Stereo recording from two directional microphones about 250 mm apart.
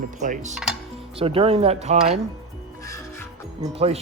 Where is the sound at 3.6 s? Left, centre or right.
Right.